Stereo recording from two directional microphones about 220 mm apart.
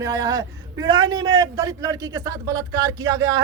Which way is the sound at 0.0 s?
15° right (ahead or behind).